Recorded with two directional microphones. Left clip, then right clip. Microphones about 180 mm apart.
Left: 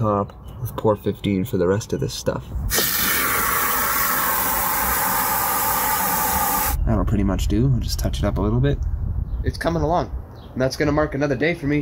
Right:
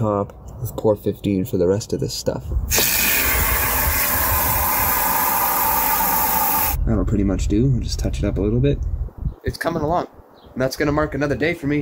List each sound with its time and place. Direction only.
1.3 s speech: 5° left (ahead or behind)
2.7 s a sound: 15° right (ahead or behind)
6.9 s speech: 20° left (ahead or behind)
9.4 s speech: 5° right (ahead or behind)